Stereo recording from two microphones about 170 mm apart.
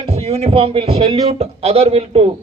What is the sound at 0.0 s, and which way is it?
A man's voice, 35° right (ahead or behind).